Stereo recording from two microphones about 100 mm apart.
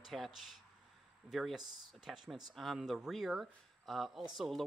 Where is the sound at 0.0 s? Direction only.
Centre (ahead or behind).